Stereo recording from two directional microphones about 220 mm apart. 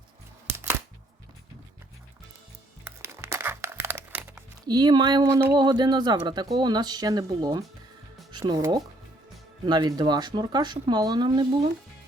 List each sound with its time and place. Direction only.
2.8 s music: 10° right (ahead or behind)
4.6 s speech: 20° right (ahead or behind)